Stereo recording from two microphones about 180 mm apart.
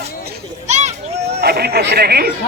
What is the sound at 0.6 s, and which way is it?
Children playing, 40° right (ahead or behind).